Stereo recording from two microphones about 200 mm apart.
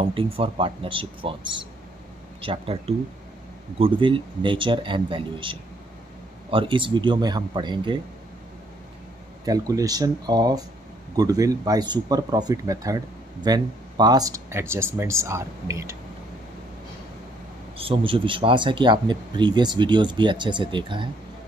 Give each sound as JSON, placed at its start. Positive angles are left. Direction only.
{"t": 0.0, "sound": "speech", "side_deg": -25}
{"t": 9.4, "sound": "speech", "side_deg": -15}
{"t": 17.7, "sound": "speech", "side_deg": -25}